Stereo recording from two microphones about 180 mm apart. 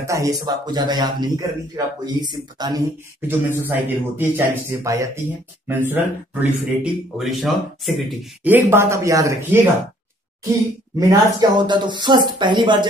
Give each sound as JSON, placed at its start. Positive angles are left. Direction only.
{"t": 0.0, "sound": "speech", "side_deg": -15}
{"t": 11.0, "sound": "speech", "side_deg": -20}